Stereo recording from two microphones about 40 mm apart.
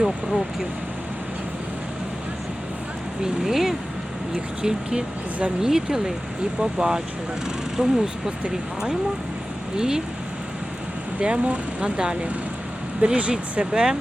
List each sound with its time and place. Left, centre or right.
3.4 s speech: centre
4.6 s speech: right
11.2 s speech: right
13.0 s speech: right
13.6 s speech: right